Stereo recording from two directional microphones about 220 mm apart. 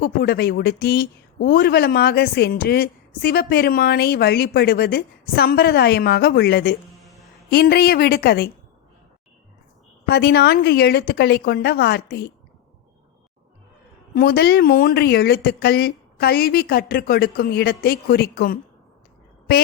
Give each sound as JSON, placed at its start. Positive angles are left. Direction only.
{"t": 0.0, "sound": "speech", "side_deg": 45}
{"t": 10.1, "sound": "speech", "side_deg": 50}
{"t": 14.2, "sound": "speech", "side_deg": 45}